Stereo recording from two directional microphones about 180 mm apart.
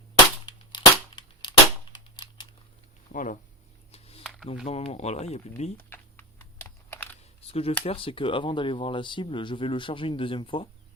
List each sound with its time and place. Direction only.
0.4 s cap gun: 25° left (ahead or behind)
3.1 s speech: 45° left (ahead or behind)
3.9 s a sound: 35° left (ahead or behind)
4.6 s speech: 35° left (ahead or behind)
5.7 s typing: 10° left (ahead or behind)
7.2 s a sound: 35° left (ahead or behind)
7.9 s speech: 30° left (ahead or behind)